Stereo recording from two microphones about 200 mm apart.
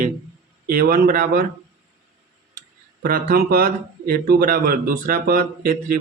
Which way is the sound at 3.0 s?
50° right (ahead or behind).